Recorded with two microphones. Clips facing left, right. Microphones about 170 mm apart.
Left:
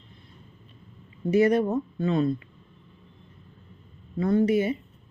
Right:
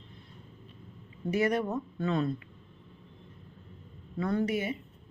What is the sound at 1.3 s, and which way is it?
Speech, 25° left (ahead or behind).